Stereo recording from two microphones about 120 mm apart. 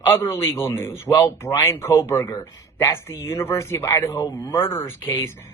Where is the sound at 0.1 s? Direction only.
20° left (ahead or behind).